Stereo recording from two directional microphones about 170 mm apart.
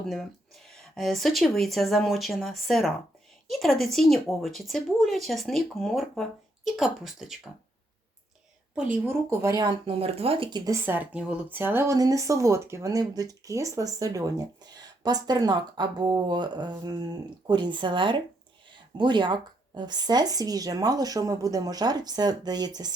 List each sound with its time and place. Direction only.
0.1 s speech: centre (ahead or behind)
8.7 s a woman's voice: 10° right (ahead or behind)
9.4 s speech: 20° right (ahead or behind)
10.7 s speech: 10° right (ahead or behind)